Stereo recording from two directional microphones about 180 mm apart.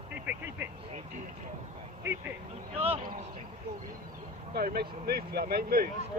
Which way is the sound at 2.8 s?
35° right (ahead or behind).